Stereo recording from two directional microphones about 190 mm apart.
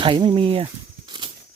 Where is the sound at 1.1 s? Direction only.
25° right (ahead or behind).